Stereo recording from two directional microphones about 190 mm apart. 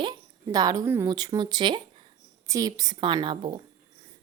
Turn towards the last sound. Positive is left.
turn(degrees=-25)  # may be behind; listen again after turning